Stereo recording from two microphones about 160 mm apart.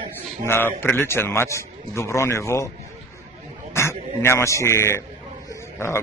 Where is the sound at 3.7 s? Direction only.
15° left (ahead or behind).